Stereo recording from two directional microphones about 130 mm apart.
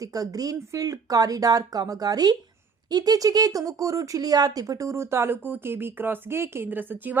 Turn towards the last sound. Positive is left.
turn(degrees=-15)  # may be behind; listen again after turning